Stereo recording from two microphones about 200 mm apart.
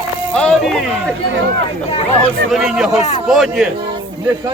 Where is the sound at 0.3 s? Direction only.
5° left (ahead or behind).